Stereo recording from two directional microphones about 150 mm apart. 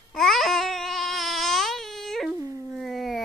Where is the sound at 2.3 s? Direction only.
20° right (ahead or behind).